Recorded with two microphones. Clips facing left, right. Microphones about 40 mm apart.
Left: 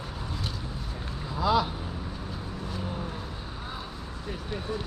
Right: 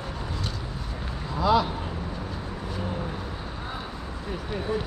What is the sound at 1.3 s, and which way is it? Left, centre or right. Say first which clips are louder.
Speech: right 3 dB; centre.